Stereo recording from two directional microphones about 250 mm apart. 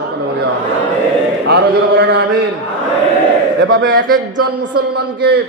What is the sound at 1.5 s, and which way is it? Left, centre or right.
Speech, right.